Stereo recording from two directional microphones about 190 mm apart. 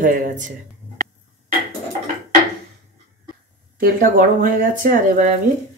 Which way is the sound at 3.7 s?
45° right (ahead or behind).